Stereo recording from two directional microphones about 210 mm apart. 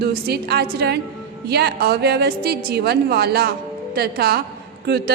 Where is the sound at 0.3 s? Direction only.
50° right (ahead or behind).